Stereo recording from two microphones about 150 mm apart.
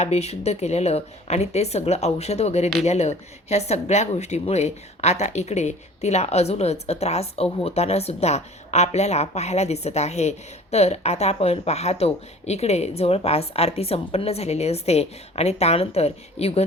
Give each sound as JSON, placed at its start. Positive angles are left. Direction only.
{"t": 0.0, "sound": "speech", "side_deg": 45}